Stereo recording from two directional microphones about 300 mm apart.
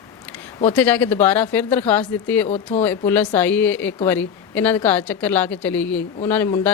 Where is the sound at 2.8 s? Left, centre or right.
Centre.